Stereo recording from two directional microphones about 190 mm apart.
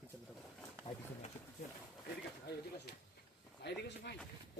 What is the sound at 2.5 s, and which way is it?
Speech, 60° left (ahead or behind).